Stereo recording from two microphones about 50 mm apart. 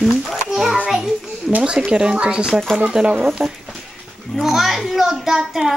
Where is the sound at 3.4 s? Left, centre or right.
Centre.